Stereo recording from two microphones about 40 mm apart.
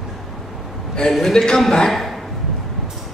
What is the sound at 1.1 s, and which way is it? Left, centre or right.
A man's voice, centre.